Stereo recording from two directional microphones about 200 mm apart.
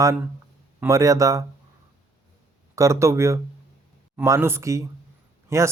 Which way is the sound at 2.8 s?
15° right (ahead or behind).